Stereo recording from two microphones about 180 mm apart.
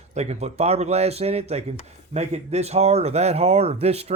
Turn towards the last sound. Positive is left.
turn(degrees=-35)  # may be behind; listen again after turning